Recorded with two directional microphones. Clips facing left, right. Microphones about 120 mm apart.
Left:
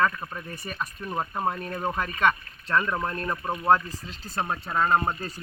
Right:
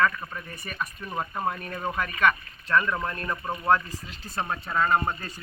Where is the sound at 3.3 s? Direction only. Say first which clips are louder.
Left 2 dB; 10° left (ahead or behind).